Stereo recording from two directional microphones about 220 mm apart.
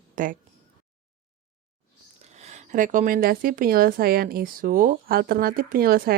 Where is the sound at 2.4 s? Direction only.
35° right (ahead or behind).